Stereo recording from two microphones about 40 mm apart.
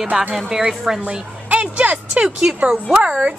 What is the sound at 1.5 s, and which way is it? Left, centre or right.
A woman's voice, right.